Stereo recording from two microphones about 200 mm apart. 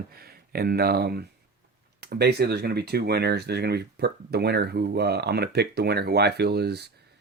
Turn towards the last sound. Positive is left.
turn(degrees=-55)  # may be behind; listen again after turning